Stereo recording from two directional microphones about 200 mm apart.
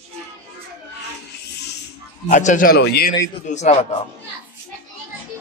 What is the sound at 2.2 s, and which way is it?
Speech, 40° left (ahead or behind).